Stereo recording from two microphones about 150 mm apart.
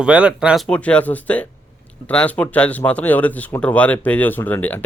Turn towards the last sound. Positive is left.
turn(degrees=10)  # may be behind; listen again after turning